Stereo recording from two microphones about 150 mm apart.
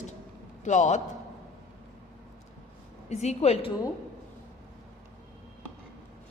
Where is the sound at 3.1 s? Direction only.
45° left (ahead or behind).